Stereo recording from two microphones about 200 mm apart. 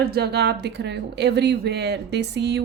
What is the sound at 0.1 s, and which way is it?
A woman's voice, 55° right (ahead or behind).